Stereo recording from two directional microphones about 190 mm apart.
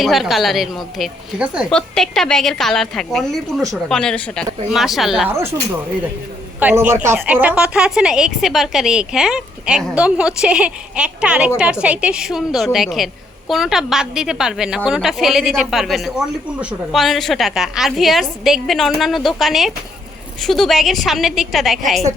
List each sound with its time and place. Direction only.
0.0 s a woman's voice: centre (ahead or behind)
6.6 s a woman's voice: 10° right (ahead or behind)